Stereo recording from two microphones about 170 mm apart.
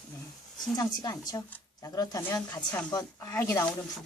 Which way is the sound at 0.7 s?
25° left (ahead or behind).